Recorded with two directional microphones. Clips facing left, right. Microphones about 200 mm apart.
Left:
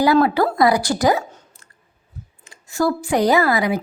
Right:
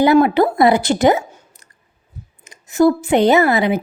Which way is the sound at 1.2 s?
10° right (ahead or behind).